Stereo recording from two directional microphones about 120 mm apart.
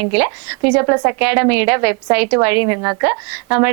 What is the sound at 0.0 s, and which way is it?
A woman's voice, 20° right (ahead or behind).